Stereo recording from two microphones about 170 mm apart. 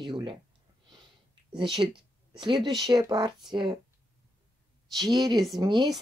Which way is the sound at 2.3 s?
25° right (ahead or behind).